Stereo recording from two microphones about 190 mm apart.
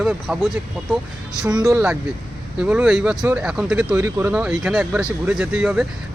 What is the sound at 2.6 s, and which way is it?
Speech, 5° right (ahead or behind).